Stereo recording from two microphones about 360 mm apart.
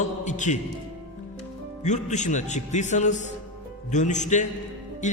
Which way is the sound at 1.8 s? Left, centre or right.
Centre.